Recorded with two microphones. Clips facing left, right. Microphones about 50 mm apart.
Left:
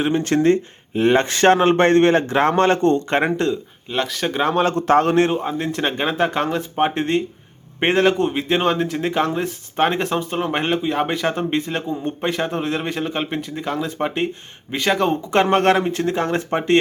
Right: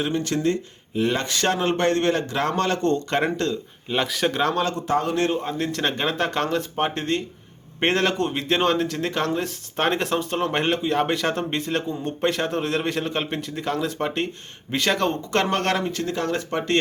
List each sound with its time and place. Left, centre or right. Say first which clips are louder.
0.0 s speech: left 6 dB; left
3.8 s speech: even; centre
4.3 s speech: left 4 dB; centre
4.9 s speech: left 9 dB; left
5.3 s speech: left 3 dB; centre